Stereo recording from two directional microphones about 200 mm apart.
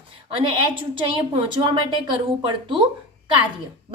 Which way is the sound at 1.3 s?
25° right (ahead or behind).